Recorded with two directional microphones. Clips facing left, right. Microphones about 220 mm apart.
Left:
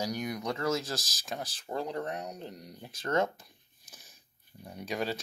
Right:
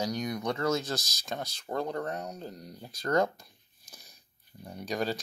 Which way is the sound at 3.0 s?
35° right (ahead or behind).